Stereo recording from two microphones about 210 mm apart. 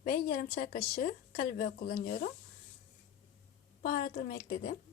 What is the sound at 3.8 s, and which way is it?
Speech, 45° left (ahead or behind).